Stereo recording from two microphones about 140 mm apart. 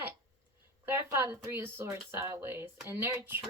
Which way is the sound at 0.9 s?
15° right (ahead or behind).